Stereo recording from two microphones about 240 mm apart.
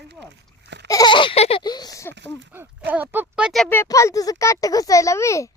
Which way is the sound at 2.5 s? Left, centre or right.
Centre.